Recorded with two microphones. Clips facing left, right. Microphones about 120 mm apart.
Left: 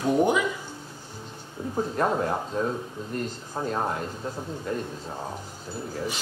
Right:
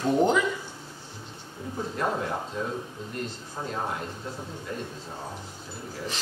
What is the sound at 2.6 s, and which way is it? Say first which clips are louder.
Speech: left 4 dB; 40° left (ahead or behind).